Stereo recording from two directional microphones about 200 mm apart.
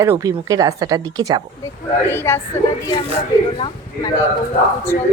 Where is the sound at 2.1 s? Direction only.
10° left (ahead or behind).